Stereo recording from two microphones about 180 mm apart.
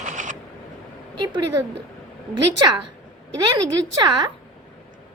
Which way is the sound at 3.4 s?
25° right (ahead or behind).